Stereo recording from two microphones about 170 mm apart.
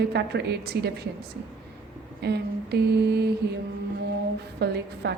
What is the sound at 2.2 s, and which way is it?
A woman's voice, 75° right (ahead or behind).